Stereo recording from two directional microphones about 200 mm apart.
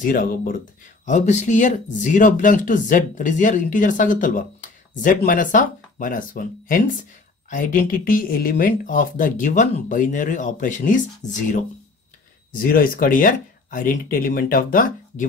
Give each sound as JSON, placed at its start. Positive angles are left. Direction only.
{"t": 0.0, "sound": "speech", "side_deg": 45}
{"t": 12.6, "sound": "speech", "side_deg": 45}